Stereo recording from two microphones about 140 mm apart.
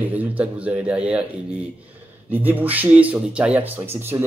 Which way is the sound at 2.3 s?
15° right (ahead or behind).